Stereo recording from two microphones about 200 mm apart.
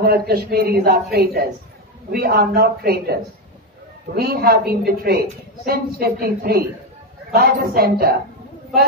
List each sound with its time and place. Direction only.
0.0 s speech: 50° right (ahead or behind)